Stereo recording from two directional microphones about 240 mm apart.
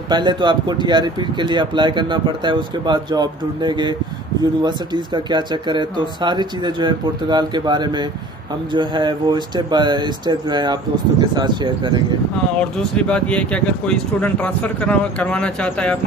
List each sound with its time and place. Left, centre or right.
0.1 s speech: centre
12.5 s speech: centre